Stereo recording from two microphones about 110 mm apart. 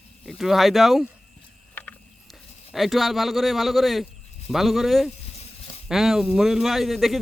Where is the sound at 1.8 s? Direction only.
15° left (ahead or behind).